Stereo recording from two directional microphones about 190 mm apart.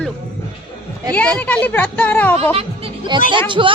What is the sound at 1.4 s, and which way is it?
Speech, 10° left (ahead or behind).